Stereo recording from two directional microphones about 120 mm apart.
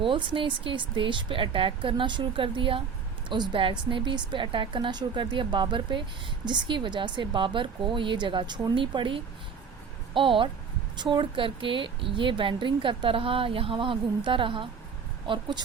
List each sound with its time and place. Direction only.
0.0 s a woman's voice: 45° right (ahead or behind)